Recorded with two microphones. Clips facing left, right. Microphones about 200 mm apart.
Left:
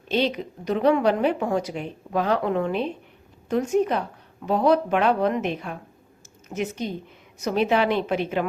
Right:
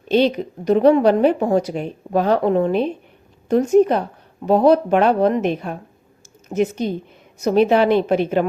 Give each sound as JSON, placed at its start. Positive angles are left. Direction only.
{"t": 0.1, "sound": "speech", "side_deg": -40}